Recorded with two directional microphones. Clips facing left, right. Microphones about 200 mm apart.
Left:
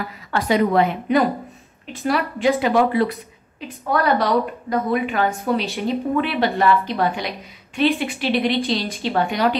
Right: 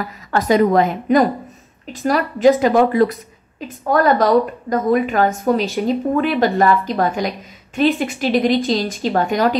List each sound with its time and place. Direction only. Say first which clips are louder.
0.3 s a woman's voice: right 4 dB; 45° right (ahead or behind)
2.4 s a woman's voice: right 5 dB; 45° right (ahead or behind)